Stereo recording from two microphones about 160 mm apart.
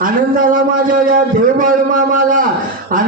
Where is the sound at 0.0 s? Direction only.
60° right (ahead or behind).